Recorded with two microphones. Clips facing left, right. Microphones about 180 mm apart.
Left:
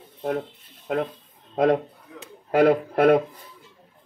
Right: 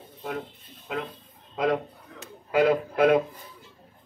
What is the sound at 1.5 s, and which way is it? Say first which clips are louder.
A man's voice: left 5 dB; 45° left (ahead or behind).